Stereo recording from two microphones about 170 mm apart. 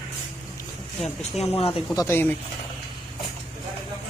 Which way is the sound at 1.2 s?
35° left (ahead or behind).